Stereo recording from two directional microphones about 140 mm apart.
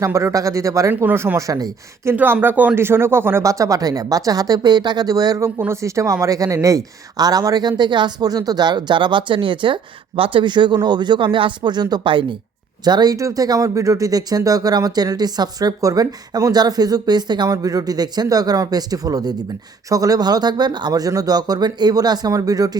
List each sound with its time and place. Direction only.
0.0 s speech: 20° right (ahead or behind)
2.1 s speech: 15° right (ahead or behind)